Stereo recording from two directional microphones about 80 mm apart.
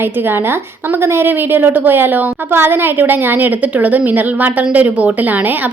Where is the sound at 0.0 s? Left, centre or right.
Right.